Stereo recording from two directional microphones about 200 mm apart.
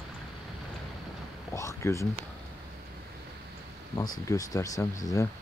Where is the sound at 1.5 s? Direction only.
15° left (ahead or behind).